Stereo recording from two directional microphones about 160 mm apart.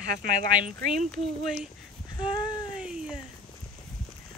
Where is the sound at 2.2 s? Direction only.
25° left (ahead or behind).